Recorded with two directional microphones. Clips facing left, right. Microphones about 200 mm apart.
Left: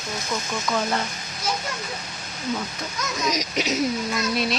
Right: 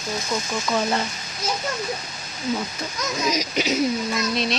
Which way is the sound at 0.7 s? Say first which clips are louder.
Right 2 dB; 5° right (ahead or behind).